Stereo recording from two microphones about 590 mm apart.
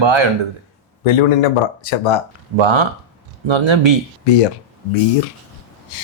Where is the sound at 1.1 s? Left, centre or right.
Left.